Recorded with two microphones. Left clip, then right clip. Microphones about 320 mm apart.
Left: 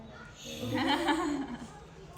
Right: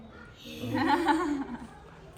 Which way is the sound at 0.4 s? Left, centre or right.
Centre.